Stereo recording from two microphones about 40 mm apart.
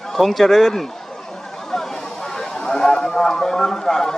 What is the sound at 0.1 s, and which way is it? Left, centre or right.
Speech, centre.